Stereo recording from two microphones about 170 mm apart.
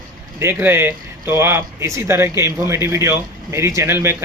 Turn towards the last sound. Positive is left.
turn(degrees=-15)  # may be behind; listen again after turning